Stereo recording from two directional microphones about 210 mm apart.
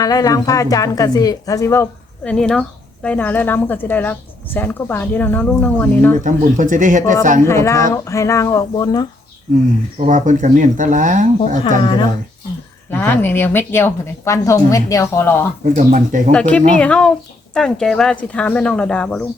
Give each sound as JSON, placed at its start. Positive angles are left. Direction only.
{"t": 0.0, "sound": "a woman's voice", "side_deg": 15}
{"t": 6.2, "sound": "speech", "side_deg": -40}
{"t": 7.4, "sound": "a woman's voice", "side_deg": 15}
{"t": 10.1, "sound": "speech", "side_deg": -35}
{"t": 11.8, "sound": "speech", "side_deg": 25}
{"t": 12.9, "sound": "a woman's voice", "side_deg": 10}
{"t": 15.6, "sound": "speech", "side_deg": -40}
{"t": 16.3, "sound": "speech", "side_deg": 5}